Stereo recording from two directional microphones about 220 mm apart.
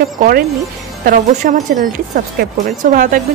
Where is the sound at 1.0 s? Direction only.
40° right (ahead or behind).